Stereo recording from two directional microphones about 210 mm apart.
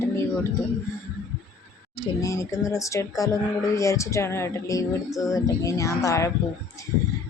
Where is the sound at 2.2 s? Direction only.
15° left (ahead or behind).